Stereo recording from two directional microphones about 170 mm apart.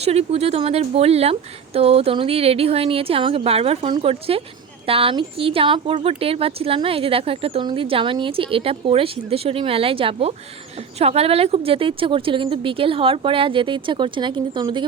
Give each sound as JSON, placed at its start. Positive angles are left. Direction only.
{"t": 0.0, "sound": "speech", "side_deg": -40}